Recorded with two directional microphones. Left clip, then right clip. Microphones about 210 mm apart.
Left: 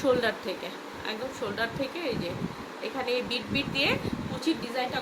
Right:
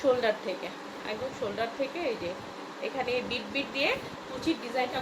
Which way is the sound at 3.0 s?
20° left (ahead or behind).